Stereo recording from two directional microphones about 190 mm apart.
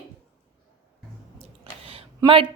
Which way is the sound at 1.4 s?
30° right (ahead or behind).